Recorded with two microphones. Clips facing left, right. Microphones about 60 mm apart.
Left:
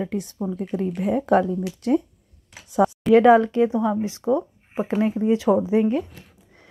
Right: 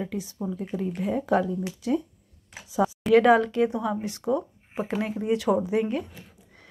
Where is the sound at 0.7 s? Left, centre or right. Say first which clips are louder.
Left 5 dB; left.